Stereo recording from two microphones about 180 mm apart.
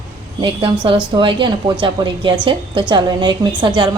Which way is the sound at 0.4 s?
30° right (ahead or behind).